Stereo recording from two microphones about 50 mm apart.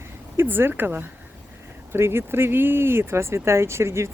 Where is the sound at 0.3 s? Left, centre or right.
Right.